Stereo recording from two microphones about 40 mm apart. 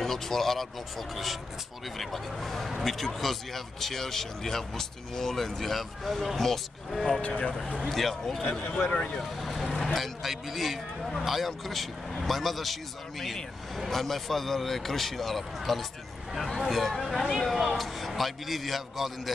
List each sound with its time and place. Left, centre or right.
0.0 s speech: centre
7.6 s speech: centre
7.9 s a man's voice: centre
8.9 s speech: left
9.2 s vehicle: centre
9.9 s speech: centre